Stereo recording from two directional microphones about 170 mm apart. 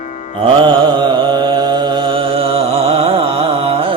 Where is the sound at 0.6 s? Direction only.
25° right (ahead or behind).